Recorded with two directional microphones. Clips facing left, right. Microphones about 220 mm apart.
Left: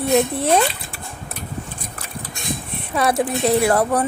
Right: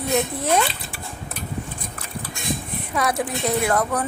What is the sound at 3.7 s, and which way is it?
Speech, 30° left (ahead or behind).